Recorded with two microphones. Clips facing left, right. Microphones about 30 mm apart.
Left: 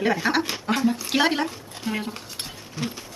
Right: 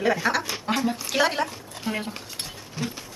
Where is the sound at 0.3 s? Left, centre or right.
Left.